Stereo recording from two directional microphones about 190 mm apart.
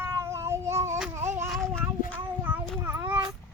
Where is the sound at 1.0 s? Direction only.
10° right (ahead or behind).